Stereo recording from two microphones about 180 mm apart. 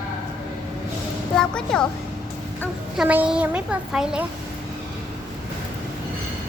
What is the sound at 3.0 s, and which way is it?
A woman's voice, 5° right (ahead or behind).